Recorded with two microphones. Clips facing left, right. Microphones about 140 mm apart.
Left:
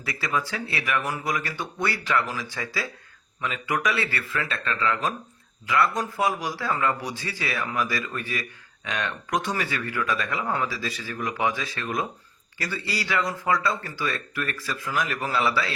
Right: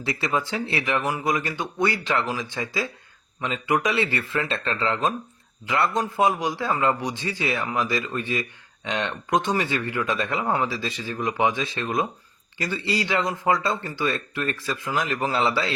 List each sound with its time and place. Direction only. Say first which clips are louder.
0.0 s speech: right 3 dB; 25° right (ahead or behind)